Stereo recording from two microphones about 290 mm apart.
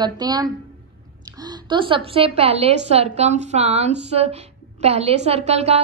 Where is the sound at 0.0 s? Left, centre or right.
Centre.